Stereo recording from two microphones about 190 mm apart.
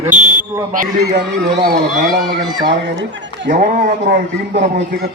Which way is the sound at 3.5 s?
45° right (ahead or behind).